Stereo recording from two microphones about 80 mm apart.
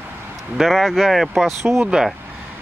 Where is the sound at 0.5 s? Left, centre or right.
Centre.